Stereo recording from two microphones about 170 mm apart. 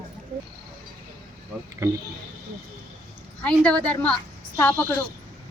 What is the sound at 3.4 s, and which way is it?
A woman's voice, 5° left (ahead or behind).